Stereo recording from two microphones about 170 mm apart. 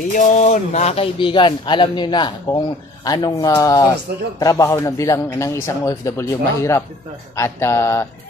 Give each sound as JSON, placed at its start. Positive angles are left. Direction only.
{"t": 0.1, "sound": "speech", "side_deg": 45}
{"t": 7.3, "sound": "mantra", "side_deg": 15}